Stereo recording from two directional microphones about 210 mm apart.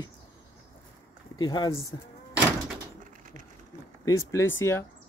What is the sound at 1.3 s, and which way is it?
Speech, 20° left (ahead or behind).